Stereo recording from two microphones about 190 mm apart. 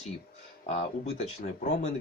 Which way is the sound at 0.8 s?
35° left (ahead or behind).